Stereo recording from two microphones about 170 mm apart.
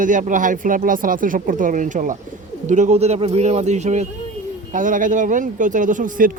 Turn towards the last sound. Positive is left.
turn(degrees=-50)  # may be behind; listen again after turning